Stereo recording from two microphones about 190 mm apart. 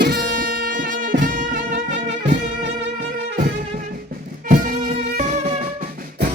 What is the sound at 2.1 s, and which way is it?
Music, 65° right (ahead or behind).